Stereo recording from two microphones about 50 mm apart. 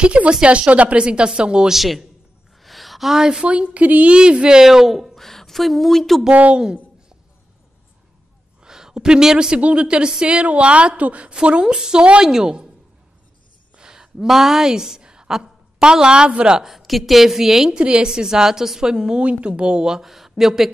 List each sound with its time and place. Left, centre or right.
0.0 s a woman's voice: right
1.7 s a woman's voice: centre
6.5 s a sound: centre
8.6 s a woman's voice: centre; by 11.3 s right
11.3 s a woman's voice: centre
13.7 s a sound: centre
14.2 s a woman's voice: centre
16.5 s a woman's voice: centre
17.7 s a woman's voice: centre